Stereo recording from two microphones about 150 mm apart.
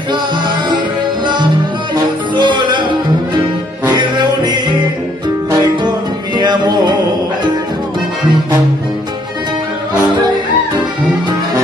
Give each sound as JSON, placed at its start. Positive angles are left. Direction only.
{"t": 1.2, "sound": "music", "side_deg": -30}
{"t": 6.3, "sound": "music", "side_deg": -30}